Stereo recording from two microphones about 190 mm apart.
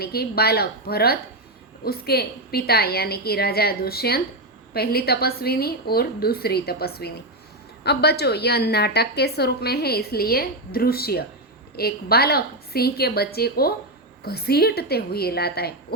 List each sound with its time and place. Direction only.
0.0 s a woman's voice: 55° left (ahead or behind)